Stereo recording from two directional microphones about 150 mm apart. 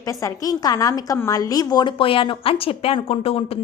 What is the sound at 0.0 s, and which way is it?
A woman's voice, 20° left (ahead or behind).